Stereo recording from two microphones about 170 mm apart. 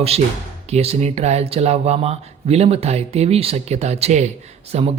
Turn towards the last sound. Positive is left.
turn(degrees=-35)  # may be behind; listen again after turning